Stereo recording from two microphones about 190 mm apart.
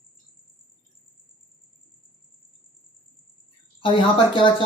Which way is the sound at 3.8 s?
25° left (ahead or behind).